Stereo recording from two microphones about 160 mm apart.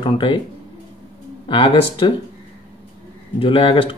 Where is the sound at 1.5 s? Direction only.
35° left (ahead or behind).